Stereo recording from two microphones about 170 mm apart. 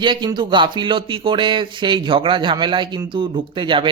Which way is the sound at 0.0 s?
25° right (ahead or behind).